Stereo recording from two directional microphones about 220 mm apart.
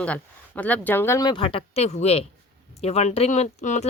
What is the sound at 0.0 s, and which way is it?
Speech, 5° left (ahead or behind).